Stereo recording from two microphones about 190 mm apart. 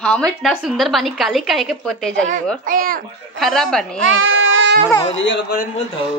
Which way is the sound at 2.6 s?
45° right (ahead or behind).